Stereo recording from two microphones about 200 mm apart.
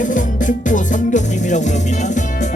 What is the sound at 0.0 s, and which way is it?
Music, 40° left (ahead or behind).